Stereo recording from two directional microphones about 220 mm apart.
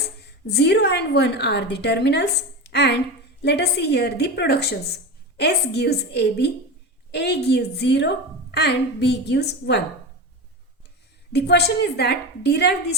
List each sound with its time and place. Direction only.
0.2 s a woman's voice: 50° left (ahead or behind)
11.3 s a woman's voice: 50° left (ahead or behind)